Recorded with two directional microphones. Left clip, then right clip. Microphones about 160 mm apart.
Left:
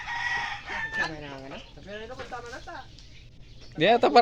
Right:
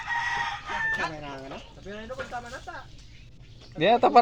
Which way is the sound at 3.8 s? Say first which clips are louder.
Even; 30° left (ahead or behind).